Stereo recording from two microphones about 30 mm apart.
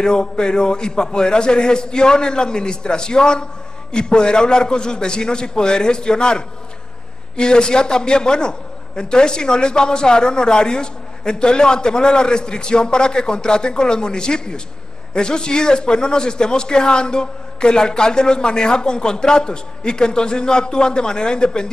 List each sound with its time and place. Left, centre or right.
0.0 s a man's voice: left